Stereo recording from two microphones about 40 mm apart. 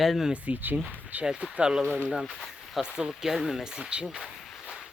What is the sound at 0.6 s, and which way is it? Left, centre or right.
Speech, right.